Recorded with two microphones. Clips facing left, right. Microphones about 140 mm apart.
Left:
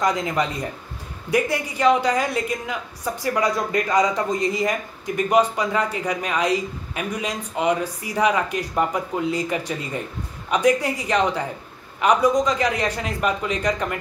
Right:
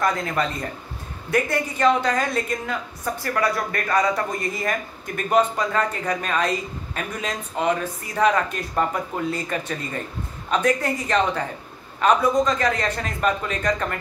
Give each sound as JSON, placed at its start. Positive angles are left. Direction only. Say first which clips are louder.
{"t": 0.0, "sound": "a woman's voice", "louder": "left 1 dB", "side_deg": 15}